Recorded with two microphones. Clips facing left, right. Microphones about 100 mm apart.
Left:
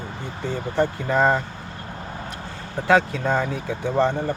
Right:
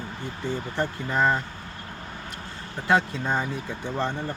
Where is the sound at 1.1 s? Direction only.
60° left (ahead or behind).